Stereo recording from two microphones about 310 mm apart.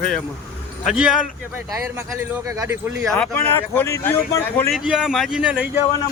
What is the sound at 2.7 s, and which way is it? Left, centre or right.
A man's voice, centre.